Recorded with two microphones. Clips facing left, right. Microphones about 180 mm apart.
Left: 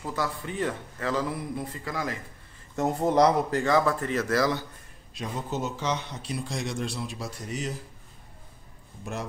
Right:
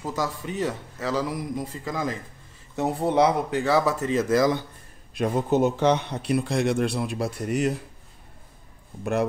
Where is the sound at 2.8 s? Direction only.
5° right (ahead or behind).